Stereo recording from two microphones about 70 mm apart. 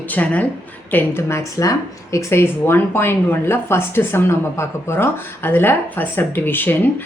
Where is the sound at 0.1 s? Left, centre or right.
Left.